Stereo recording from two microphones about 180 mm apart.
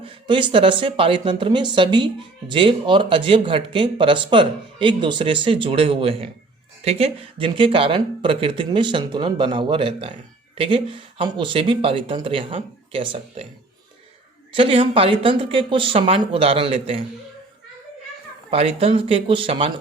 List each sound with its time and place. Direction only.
0.0 s speech: 25° right (ahead or behind)
14.5 s speech: 30° right (ahead or behind)
18.5 s speech: 30° right (ahead or behind)